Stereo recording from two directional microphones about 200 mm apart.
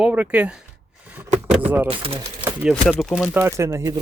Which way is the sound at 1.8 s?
25° right (ahead or behind).